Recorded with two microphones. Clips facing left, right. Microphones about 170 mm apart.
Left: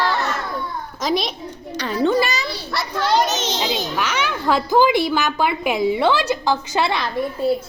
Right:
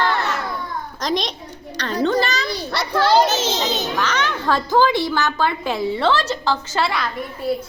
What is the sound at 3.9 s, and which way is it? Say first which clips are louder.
A woman's voice: right 1 dB; 10° left (ahead or behind).